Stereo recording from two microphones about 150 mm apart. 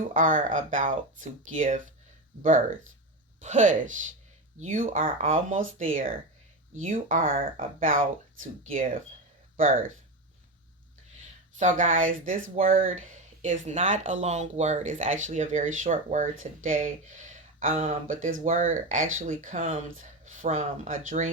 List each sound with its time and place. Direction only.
0.1 s speech: 60° right (ahead or behind)
3.4 s speech: 55° right (ahead or behind)
11.5 s speech: 55° right (ahead or behind)